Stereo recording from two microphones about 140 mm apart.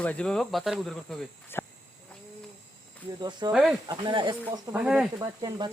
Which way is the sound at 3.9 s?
35° right (ahead or behind).